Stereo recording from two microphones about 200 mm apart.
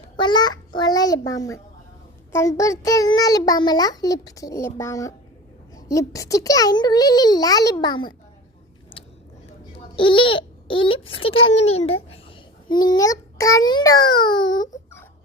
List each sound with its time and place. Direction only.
0.2 s a child's voice: 20° left (ahead or behind)
9.7 s a sound: 25° left (ahead or behind)
11.0 s a child's voice: 80° left
12.6 s a child's voice: 20° left (ahead or behind)